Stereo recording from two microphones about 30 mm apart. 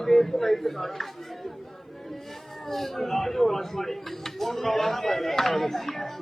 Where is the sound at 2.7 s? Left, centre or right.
Centre.